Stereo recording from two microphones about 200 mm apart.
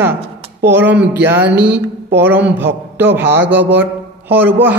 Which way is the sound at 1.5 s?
55° right (ahead or behind).